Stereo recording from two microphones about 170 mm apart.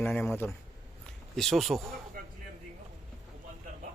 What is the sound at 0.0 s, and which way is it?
Speech, 10° left (ahead or behind).